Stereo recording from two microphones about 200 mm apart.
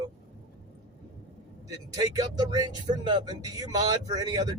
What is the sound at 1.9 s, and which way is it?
Speech, 20° right (ahead or behind).